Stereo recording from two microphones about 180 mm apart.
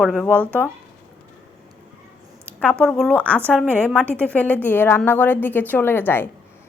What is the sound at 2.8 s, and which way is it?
A woman's voice, 5° left (ahead or behind).